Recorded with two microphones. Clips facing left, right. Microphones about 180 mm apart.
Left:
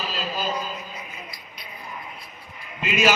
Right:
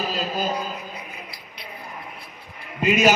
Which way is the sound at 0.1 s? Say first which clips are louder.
Right 3 dB; 45° right (ahead or behind).